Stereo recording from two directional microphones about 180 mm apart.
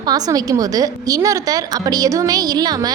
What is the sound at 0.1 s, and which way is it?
A woman's voice, 20° right (ahead or behind).